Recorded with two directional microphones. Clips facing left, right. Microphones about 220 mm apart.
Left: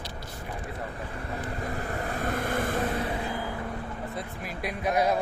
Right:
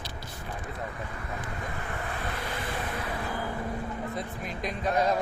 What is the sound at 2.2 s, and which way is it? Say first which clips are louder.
Vehicle: left 6 dB; 50° left (ahead or behind).